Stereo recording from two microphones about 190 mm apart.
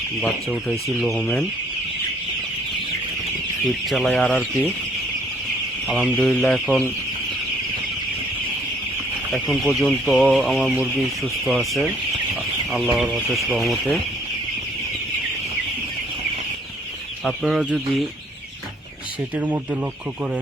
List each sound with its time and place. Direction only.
0.7 s speech: centre (ahead or behind)
3.8 s speech: centre (ahead or behind)
6.1 s speech: 10° left (ahead or behind)
9.3 s speech: centre (ahead or behind)
17.2 s speech: 5° right (ahead or behind)